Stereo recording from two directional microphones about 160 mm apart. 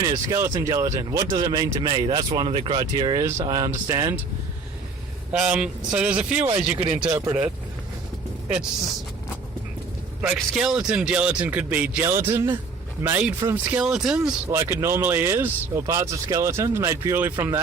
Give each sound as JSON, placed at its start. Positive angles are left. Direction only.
{"t": 0.0, "sound": "speech", "side_deg": -20}
{"t": 5.3, "sound": "speech", "side_deg": -5}
{"t": 10.3, "sound": "speech", "side_deg": 0}
{"t": 14.5, "sound": "speech", "side_deg": -15}